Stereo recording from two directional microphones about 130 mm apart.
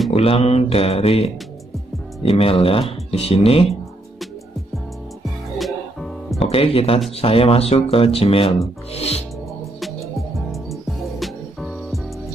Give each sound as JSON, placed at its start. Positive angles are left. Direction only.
{"t": 0.1, "sound": "speech", "side_deg": 50}
{"t": 5.2, "sound": "music", "side_deg": 0}
{"t": 6.4, "sound": "speech", "side_deg": 50}
{"t": 8.9, "sound": "music", "side_deg": 55}
{"t": 9.8, "sound": "music", "side_deg": 0}